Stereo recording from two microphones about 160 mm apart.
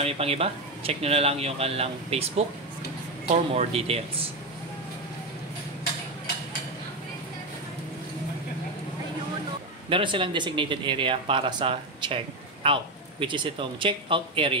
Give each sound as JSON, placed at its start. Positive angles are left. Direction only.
{"t": 0.0, "sound": "speech", "side_deg": -40}
{"t": 3.5, "sound": "speech", "side_deg": -40}
{"t": 9.8, "sound": "speech", "side_deg": -35}